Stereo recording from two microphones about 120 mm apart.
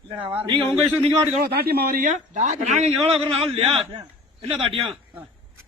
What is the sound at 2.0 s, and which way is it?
Speech, 90° right.